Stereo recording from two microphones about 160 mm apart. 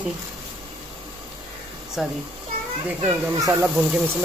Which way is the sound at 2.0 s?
Centre (ahead or behind).